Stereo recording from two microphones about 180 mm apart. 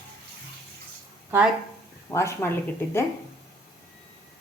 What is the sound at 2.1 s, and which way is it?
Speech, 15° left (ahead or behind).